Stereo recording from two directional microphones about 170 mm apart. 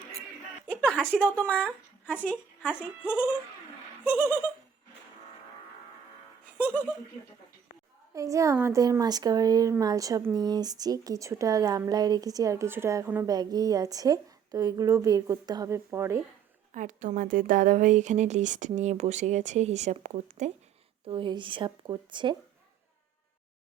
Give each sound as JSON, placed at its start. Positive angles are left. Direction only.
{"t": 0.8, "sound": "a woman's voice", "side_deg": 5}
{"t": 2.6, "sound": "speech", "side_deg": -5}
{"t": 8.1, "sound": "speech", "side_deg": -20}
{"t": 16.7, "sound": "speech", "side_deg": -50}
{"t": 21.0, "sound": "speech", "side_deg": -30}